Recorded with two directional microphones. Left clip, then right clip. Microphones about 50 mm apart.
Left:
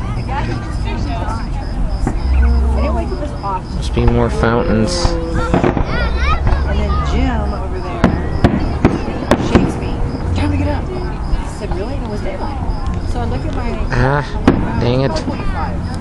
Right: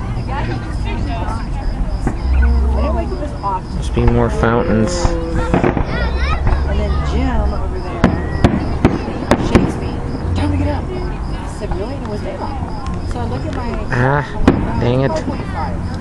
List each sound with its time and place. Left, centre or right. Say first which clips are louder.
3.9 s speech: even; centre
4.8 s music: left 1 dB; right
5.5 s fireworks: even; centre
5.9 s a sound: left 2 dB; left
8.0 s fireworks: even; centre
10.3 s vehicle: even; left
13.9 s speech: even; centre